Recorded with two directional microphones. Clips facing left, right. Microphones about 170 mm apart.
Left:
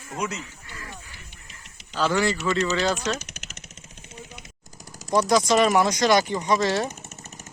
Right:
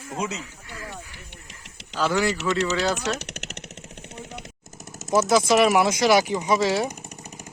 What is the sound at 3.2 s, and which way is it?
Vehicle, 70° right (ahead or behind).